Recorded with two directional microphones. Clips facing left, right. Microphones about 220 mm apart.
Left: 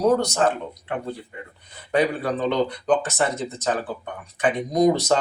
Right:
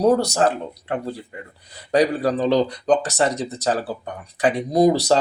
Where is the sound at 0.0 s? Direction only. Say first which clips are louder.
Right 2 dB; 35° right (ahead or behind).